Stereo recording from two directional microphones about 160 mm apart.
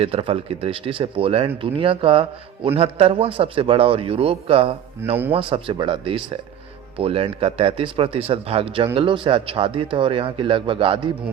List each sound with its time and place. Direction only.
0.0 s a man's voice: 35° right (ahead or behind)